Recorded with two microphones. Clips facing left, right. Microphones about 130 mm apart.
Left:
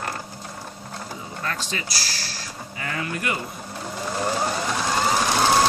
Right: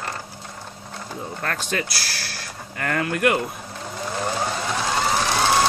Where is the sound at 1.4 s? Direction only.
55° right (ahead or behind).